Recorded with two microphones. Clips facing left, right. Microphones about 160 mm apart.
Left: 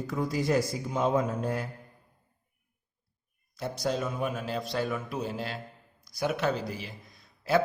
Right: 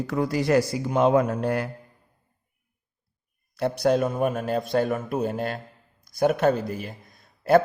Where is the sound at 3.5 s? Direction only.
65° right (ahead or behind).